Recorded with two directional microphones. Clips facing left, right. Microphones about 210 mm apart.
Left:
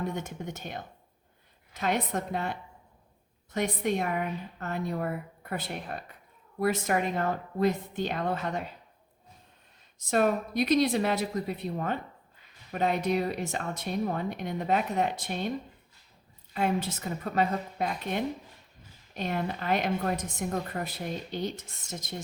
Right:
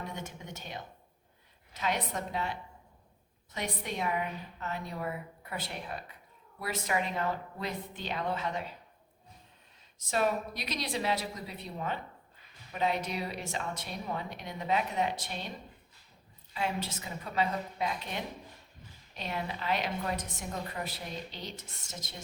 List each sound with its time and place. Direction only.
0.3 s speech: 50° left (ahead or behind)
10.1 s speech: 50° left (ahead or behind)
16.6 s speech: 50° left (ahead or behind)